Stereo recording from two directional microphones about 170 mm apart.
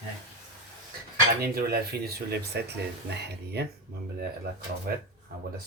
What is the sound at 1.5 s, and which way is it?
A man's voice, 65° right (ahead or behind).